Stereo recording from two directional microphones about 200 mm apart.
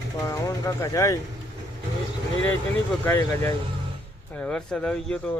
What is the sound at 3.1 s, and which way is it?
A man's voice, 10° left (ahead or behind).